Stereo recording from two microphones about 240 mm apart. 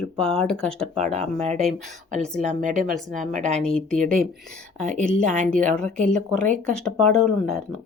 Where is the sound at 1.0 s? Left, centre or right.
Right.